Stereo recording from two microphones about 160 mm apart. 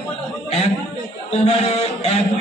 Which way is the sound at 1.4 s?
45° left (ahead or behind).